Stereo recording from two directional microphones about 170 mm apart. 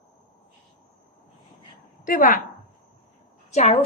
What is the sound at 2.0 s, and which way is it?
Speech, 55° left (ahead or behind).